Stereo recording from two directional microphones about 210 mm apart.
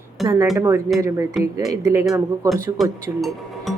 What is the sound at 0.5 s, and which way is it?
Speech, 10° right (ahead or behind).